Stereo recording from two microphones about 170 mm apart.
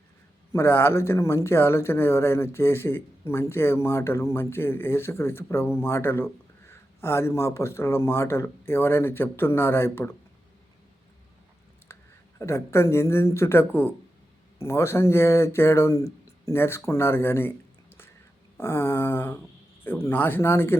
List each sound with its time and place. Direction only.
0.5 s speech: 15° left (ahead or behind)
12.4 s speech: 15° left (ahead or behind)
18.5 s speech: 15° left (ahead or behind)